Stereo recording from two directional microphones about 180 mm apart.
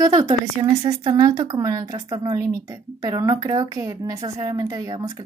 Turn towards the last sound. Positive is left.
turn(degrees=-20)  # may be behind; listen again after turning